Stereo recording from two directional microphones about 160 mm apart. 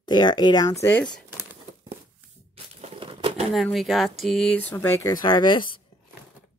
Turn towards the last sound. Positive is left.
turn(degrees=30)  # may be behind; listen again after turning